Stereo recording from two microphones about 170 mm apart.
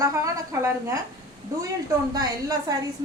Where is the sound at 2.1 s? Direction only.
20° right (ahead or behind).